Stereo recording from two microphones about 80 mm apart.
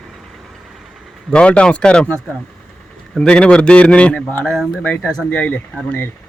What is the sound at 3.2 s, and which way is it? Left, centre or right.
Speech, centre.